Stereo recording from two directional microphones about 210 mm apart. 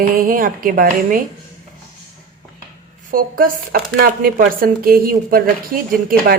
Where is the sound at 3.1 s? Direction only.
45° right (ahead or behind).